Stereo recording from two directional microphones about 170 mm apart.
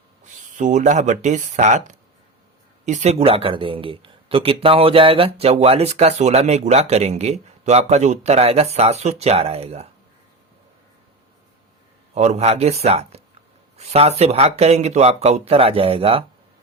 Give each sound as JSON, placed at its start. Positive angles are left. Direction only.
{"t": 0.5, "sound": "speech", "side_deg": -45}
{"t": 12.1, "sound": "speech", "side_deg": -40}